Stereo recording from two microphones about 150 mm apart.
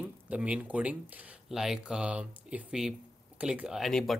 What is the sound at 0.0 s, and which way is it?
Speech, 10° right (ahead or behind).